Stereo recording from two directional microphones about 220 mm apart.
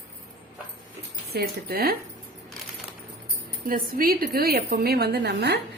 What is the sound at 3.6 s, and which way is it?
A woman's voice, 40° right (ahead or behind).